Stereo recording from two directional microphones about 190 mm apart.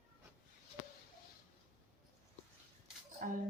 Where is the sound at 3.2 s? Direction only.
45° right (ahead or behind).